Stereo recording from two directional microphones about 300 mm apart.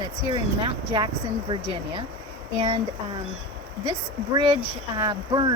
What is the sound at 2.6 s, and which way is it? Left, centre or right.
Speech, centre.